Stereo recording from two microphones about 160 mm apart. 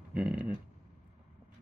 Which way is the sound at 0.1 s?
5° right (ahead or behind).